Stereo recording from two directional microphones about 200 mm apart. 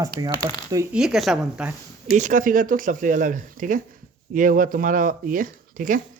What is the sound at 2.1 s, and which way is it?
Speech, 40° right (ahead or behind).